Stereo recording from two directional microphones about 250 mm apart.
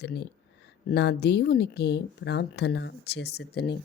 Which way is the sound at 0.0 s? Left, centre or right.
Left.